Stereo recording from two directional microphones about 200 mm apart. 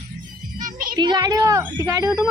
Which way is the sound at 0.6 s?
45° right (ahead or behind).